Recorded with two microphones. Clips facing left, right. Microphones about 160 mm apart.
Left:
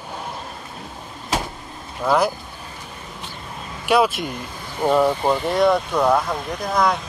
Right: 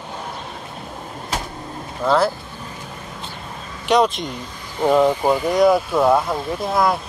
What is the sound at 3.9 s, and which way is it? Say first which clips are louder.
Speech: right 1 dB; 5° left (ahead or behind).